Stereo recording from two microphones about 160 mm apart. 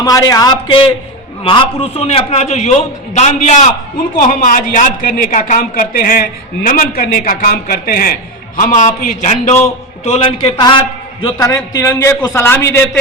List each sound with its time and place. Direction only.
0.0 s a man's voice: 20° left (ahead or behind); by 9.6 s 50° left (ahead or behind)
10.0 s a man's voice: 35° left (ahead or behind); by 12.9 s 15° left (ahead or behind)